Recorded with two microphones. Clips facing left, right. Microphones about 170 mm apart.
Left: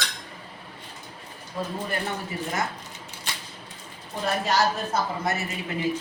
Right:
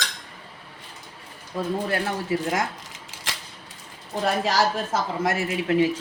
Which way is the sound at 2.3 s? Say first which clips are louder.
Right 8 dB; 90° right.